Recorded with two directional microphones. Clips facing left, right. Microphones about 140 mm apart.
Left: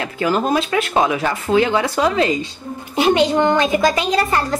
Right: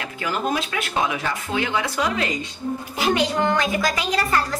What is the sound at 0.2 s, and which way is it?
A child's voice, 40° left (ahead or behind).